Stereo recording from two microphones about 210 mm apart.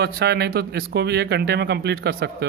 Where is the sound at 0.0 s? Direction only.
50° right (ahead or behind).